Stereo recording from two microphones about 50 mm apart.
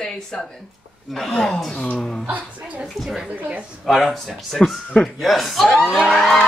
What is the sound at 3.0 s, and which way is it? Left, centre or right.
A woman's voice, centre.